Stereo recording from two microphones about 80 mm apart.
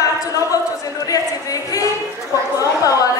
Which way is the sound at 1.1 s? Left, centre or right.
Left.